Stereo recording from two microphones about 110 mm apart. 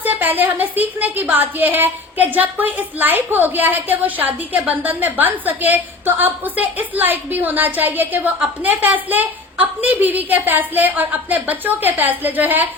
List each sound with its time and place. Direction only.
0.0 s a woman's voice: 15° right (ahead or behind)